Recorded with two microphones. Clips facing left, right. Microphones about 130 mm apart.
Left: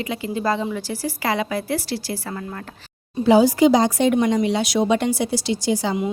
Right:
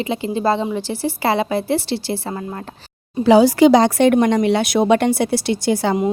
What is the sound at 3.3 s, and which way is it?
A woman's voice, 80° right.